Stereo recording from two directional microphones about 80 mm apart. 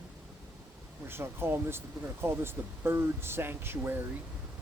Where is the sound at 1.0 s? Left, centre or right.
Right.